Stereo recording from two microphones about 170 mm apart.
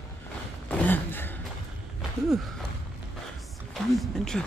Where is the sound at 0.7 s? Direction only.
10° left (ahead or behind).